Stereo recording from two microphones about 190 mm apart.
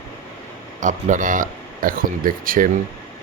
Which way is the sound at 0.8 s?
40° right (ahead or behind).